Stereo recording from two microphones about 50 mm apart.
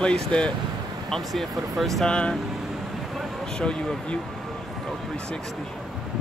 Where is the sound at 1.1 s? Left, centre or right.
Centre.